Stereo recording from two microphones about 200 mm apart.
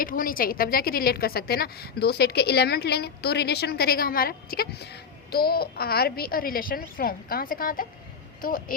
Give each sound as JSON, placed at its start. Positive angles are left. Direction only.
{"t": 0.0, "sound": "a woman's voice", "side_deg": 45}